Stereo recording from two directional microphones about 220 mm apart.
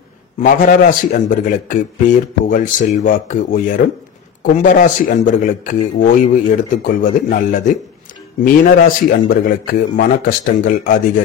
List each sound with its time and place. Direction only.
0.4 s speech: 35° left (ahead or behind)